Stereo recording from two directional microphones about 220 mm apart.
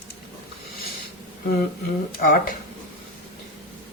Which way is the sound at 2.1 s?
40° left (ahead or behind).